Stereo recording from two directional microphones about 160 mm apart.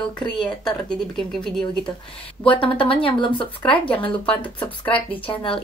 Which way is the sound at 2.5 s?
35° left (ahead or behind).